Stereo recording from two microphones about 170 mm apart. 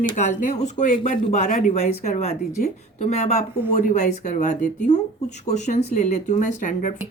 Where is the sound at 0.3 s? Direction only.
45° left (ahead or behind).